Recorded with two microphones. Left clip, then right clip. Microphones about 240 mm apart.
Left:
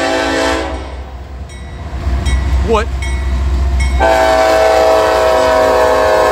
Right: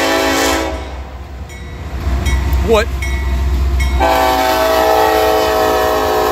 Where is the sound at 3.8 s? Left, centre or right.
Centre.